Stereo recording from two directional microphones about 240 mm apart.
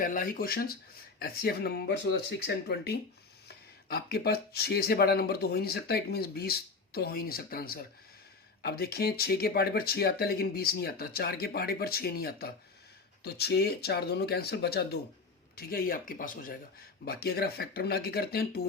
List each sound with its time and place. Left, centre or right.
0.0 s speech: left